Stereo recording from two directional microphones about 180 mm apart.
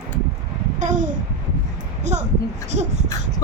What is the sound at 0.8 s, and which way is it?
A child's voice, 45° right (ahead or behind).